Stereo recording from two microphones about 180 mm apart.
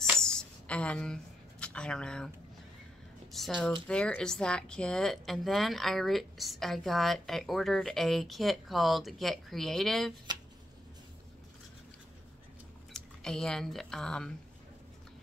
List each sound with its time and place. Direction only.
0.1 s a sound: 5° left (ahead or behind)
3.3 s speech: centre (ahead or behind)
12.9 s speech: 5° left (ahead or behind)